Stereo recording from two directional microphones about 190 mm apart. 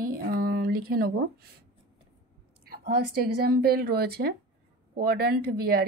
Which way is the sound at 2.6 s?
55° right (ahead or behind).